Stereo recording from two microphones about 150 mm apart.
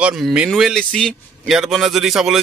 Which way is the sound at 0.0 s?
5° right (ahead or behind).